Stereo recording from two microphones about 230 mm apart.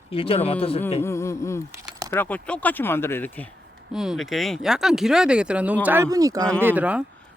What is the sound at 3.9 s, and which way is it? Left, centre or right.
Speech, centre.